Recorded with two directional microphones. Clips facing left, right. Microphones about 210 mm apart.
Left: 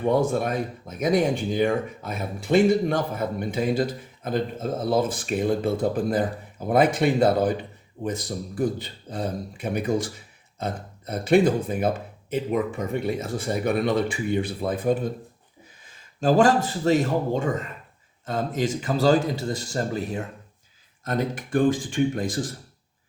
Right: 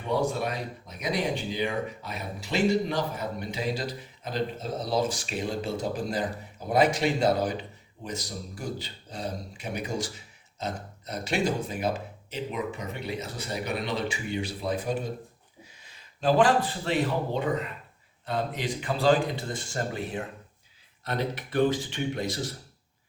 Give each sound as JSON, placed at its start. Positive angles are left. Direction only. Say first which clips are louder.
{"t": 0.0, "sound": "speech", "louder": "left 6 dB", "side_deg": 50}